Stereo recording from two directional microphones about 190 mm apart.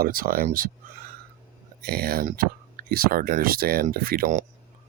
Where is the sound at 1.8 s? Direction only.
55° right (ahead or behind).